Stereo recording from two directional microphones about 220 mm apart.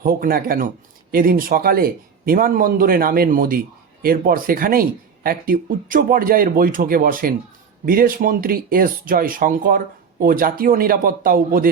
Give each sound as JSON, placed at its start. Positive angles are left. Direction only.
{"t": 0.0, "sound": "speech", "side_deg": -40}